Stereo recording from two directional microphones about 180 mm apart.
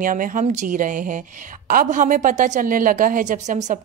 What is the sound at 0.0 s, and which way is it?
A woman's voice, 50° right (ahead or behind).